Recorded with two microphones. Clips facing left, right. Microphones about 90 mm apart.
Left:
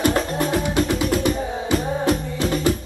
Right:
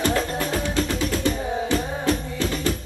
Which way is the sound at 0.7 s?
15° left (ahead or behind).